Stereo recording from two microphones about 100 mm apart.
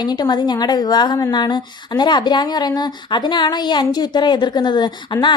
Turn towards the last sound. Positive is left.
turn(degrees=50)  # may be behind; listen again after turning